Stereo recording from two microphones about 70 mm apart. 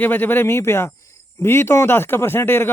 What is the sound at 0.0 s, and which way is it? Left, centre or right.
Speech, left.